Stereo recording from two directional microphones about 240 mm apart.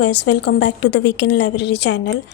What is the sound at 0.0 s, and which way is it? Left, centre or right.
A woman's voice, left.